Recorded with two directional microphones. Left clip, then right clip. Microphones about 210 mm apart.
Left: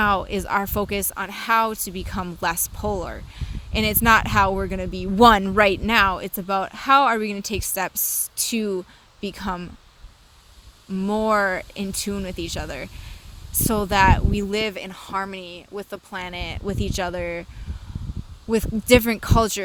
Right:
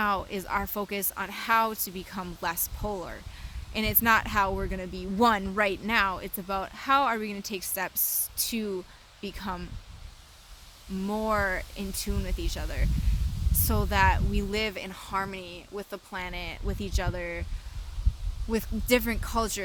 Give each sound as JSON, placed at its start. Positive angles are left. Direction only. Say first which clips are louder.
{"t": 0.0, "sound": "speech", "louder": "left 7 dB", "side_deg": 40}
{"t": 11.0, "sound": "speech", "louder": "left 7 dB", "side_deg": 35}
{"t": 18.5, "sound": "speech", "louder": "left 9 dB", "side_deg": 35}